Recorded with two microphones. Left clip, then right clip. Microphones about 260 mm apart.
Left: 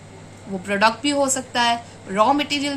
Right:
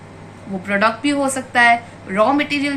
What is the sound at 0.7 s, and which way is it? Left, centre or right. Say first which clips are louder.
A woman's voice: right 2 dB; left.